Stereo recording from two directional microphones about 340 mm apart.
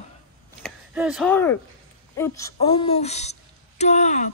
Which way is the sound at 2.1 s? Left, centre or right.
Centre.